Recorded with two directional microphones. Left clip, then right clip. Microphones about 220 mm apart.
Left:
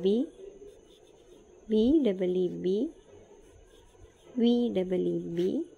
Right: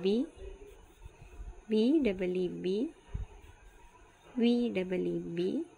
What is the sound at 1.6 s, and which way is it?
A woman's voice, 5° right (ahead or behind).